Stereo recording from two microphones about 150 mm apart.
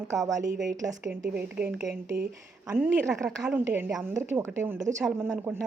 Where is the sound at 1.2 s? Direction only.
10° right (ahead or behind).